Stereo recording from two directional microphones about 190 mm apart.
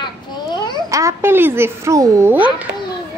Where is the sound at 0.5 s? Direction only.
25° left (ahead or behind).